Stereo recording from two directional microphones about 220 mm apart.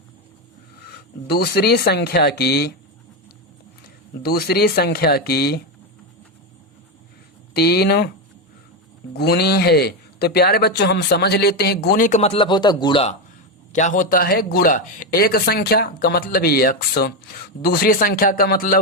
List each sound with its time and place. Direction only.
1.3 s speech: 45° left (ahead or behind)
3.8 s speech: 45° left (ahead or behind)
7.5 s speech: 45° left (ahead or behind)
9.1 s speech: 45° left (ahead or behind); by 13.1 s 25° left (ahead or behind)
13.7 s a man's voice: 35° left (ahead or behind)